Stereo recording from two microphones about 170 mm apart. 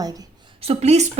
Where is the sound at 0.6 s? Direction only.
35° right (ahead or behind).